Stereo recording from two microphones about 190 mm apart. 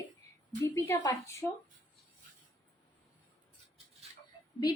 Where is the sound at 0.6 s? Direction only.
15° left (ahead or behind).